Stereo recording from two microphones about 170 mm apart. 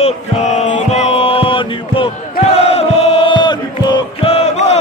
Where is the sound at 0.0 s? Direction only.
45° left (ahead or behind).